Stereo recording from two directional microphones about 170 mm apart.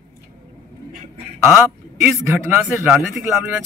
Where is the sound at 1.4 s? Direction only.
15° right (ahead or behind).